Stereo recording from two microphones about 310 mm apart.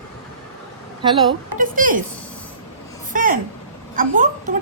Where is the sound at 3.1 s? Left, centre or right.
Right.